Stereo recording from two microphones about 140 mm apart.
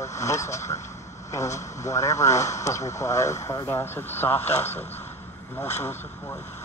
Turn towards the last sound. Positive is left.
turn(degrees=15)  # may be behind; listen again after turning